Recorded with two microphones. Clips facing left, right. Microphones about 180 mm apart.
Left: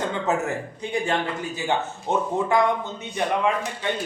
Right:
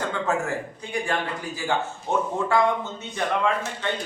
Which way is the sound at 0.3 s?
20° left (ahead or behind).